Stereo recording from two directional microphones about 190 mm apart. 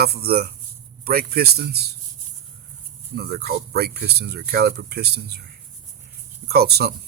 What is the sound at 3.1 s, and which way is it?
Speech, 55° right (ahead or behind).